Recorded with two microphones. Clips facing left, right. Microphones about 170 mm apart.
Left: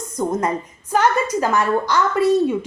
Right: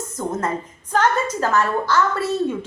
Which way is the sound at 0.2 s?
15° left (ahead or behind).